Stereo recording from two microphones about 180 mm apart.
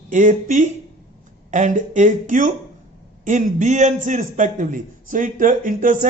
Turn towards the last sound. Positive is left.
turn(degrees=-50)  # may be behind; listen again after turning